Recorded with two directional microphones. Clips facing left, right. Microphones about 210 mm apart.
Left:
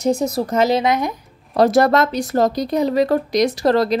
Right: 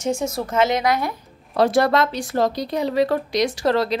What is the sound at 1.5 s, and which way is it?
Speech, 40° left (ahead or behind).